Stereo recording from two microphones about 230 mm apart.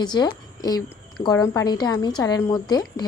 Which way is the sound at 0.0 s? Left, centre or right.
Centre.